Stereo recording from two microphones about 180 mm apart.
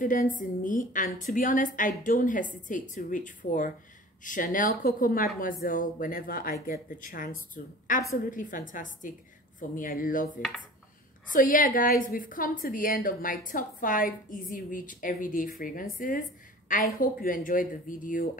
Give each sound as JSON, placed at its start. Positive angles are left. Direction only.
{"t": 0.0, "sound": "a woman's voice", "side_deg": 50}